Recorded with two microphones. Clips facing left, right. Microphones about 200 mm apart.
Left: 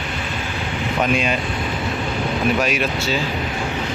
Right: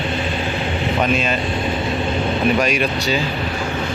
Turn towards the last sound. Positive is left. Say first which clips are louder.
# right 2 dB
turn(degrees=5)  # may be behind; listen again after turning